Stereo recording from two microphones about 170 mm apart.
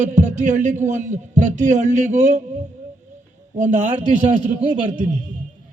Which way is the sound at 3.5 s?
45° right (ahead or behind).